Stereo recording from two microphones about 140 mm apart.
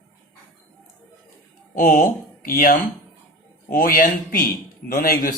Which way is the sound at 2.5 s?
90° left.